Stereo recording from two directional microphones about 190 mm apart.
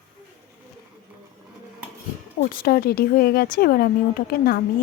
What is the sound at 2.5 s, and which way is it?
Speech, 50° left (ahead or behind).